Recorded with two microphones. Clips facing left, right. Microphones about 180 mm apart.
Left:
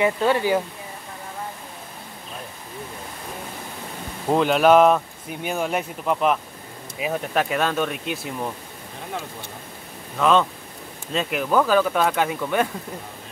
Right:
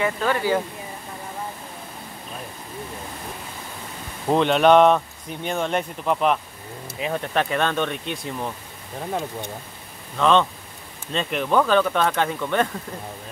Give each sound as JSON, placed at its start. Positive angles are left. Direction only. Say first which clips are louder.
{"t": 0.0, "sound": "speech", "louder": "left 3 dB", "side_deg": 20}
{"t": 4.3, "sound": "speech", "louder": "even", "side_deg": 5}
{"t": 10.1, "sound": "speech", "louder": "even", "side_deg": 5}